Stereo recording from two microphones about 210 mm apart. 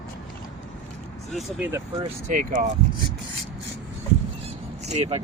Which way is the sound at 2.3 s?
40° right (ahead or behind).